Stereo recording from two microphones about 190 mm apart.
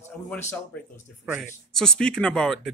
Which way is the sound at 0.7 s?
10° left (ahead or behind).